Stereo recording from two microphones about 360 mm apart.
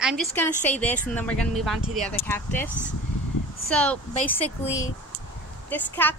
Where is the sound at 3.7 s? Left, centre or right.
Centre.